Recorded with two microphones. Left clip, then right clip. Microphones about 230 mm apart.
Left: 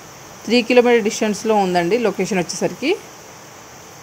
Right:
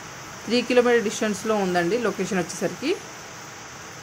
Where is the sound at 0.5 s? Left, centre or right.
Centre.